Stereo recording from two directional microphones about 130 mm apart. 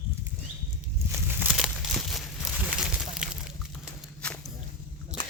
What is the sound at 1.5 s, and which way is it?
Crumpling, centre (ahead or behind).